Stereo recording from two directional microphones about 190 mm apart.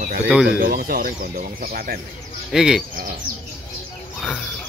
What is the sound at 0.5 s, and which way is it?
Speech, 50° right (ahead or behind).